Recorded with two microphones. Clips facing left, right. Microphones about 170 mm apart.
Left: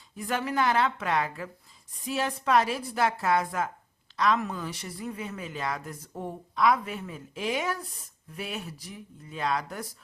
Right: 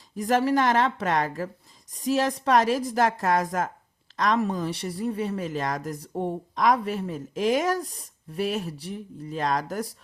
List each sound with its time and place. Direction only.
0.2 s speech: 40° right (ahead or behind)